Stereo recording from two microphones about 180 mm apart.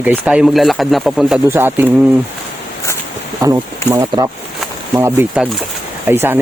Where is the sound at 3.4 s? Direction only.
15° right (ahead or behind).